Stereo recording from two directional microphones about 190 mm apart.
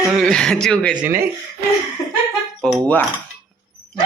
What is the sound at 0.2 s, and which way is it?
Speech, 5° left (ahead or behind).